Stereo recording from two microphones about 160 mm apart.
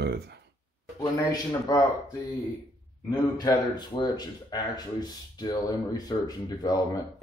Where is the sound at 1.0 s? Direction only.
25° left (ahead or behind).